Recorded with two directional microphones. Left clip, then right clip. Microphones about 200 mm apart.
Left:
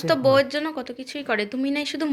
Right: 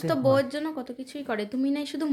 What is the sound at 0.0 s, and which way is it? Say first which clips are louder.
Speech: left 5 dB; 10° right (ahead or behind).